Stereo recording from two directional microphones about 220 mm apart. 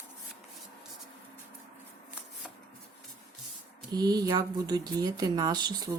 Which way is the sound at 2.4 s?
Centre (ahead or behind).